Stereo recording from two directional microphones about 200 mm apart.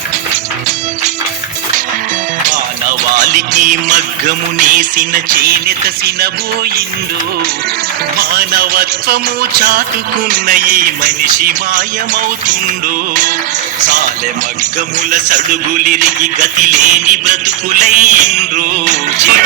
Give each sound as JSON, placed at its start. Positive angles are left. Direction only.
{"t": 3.2, "sound": "music", "side_deg": -40}
{"t": 8.2, "sound": "music", "side_deg": -50}
{"t": 15.1, "sound": "music", "side_deg": -40}